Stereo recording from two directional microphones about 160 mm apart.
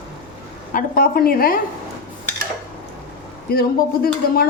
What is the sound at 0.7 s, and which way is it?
Speech, 65° left (ahead or behind).